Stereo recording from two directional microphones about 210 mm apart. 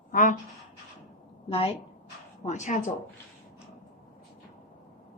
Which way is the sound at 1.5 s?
25° left (ahead or behind).